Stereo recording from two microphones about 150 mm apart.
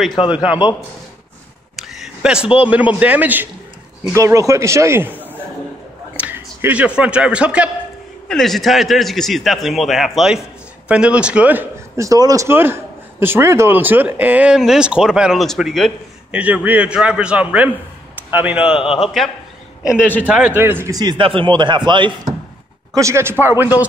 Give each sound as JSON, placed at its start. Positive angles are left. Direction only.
{"t": 0.3, "sound": "a man's voice", "side_deg": -10}
{"t": 1.8, "sound": "a sound", "side_deg": 0}
{"t": 3.0, "sound": "a man's voice", "side_deg": -10}
{"t": 12.0, "sound": "a man's voice", "side_deg": -25}
{"t": 16.3, "sound": "a man's voice", "side_deg": -10}
{"t": 21.0, "sound": "speech", "side_deg": -30}
{"t": 22.9, "sound": "a man's voice", "side_deg": -20}